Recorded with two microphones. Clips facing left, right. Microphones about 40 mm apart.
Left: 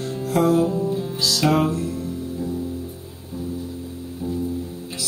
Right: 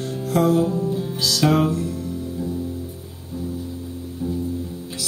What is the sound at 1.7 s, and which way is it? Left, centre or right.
Music, left.